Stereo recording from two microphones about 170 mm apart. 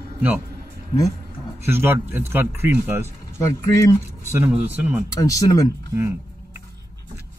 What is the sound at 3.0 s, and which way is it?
Speech, 15° left (ahead or behind).